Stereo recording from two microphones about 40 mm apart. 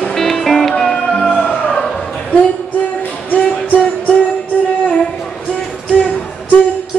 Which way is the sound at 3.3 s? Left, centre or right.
Left.